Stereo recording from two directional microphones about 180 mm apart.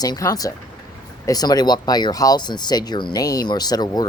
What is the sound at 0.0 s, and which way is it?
Speech, 20° left (ahead or behind).